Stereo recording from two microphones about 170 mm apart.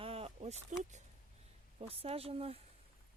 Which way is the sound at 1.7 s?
35° right (ahead or behind).